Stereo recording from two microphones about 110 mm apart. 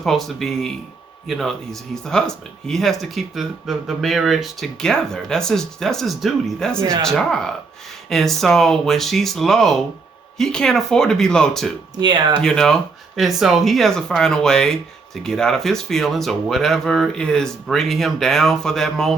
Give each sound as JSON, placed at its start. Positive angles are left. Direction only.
{"t": 0.0, "sound": "speech", "side_deg": 0}
{"t": 6.7, "sound": "speech", "side_deg": -25}
{"t": 7.0, "sound": "speech", "side_deg": 5}
{"t": 11.9, "sound": "speech", "side_deg": -40}
{"t": 12.4, "sound": "speech", "side_deg": 5}